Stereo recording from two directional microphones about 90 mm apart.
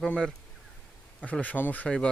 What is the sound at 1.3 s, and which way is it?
Speech, 15° left (ahead or behind).